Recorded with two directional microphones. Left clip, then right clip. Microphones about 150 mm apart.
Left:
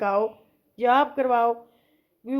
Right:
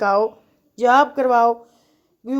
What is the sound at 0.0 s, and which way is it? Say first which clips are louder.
A woman's voice: right 6 dB; 30° right (ahead or behind).